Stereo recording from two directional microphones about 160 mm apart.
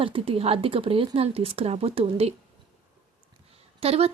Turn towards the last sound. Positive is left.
turn(degrees=-40)  # may be behind; listen again after turning